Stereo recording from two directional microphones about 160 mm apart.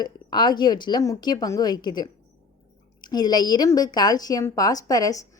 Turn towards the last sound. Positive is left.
turn(degrees=20)  # may be behind; listen again after turning